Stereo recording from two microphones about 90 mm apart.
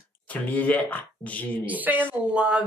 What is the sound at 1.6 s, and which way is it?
Speech, 20° right (ahead or behind).